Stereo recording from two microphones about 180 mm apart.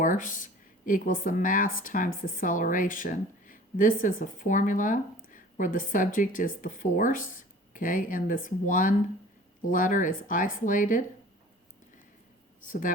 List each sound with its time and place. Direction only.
0.0 s a woman's voice: 45° left (ahead or behind)
12.6 s a woman's voice: 50° left (ahead or behind)